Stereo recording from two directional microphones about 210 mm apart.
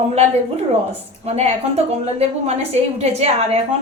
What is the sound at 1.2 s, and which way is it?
A woman's voice, 30° right (ahead or behind).